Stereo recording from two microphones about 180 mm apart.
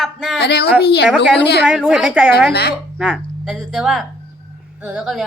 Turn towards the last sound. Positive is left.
turn(degrees=0)  # may be behind; listen again after turning